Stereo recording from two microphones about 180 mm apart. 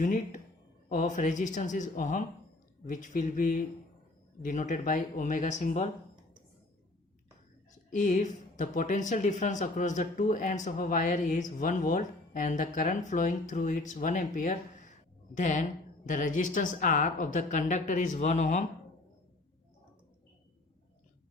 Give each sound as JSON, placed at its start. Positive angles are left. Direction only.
{"t": 0.0, "sound": "a woman's voice", "side_deg": 45}
{"t": 7.7, "sound": "a woman's voice", "side_deg": 45}